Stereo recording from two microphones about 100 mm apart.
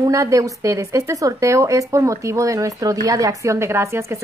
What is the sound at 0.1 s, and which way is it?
Speech, 30° right (ahead or behind).